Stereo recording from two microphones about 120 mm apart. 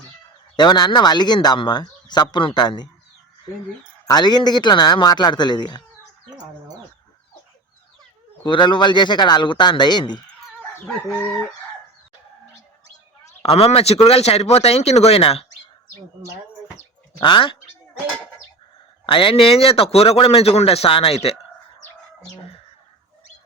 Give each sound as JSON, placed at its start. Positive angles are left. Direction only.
{"t": 0.5, "sound": "speech", "side_deg": 35}
{"t": 4.0, "sound": "speech", "side_deg": 35}
{"t": 8.4, "sound": "speech", "side_deg": 40}
{"t": 13.4, "sound": "speech", "side_deg": 55}
{"t": 17.2, "sound": "a man's voice", "side_deg": 45}
{"t": 19.0, "sound": "a man's voice", "side_deg": 45}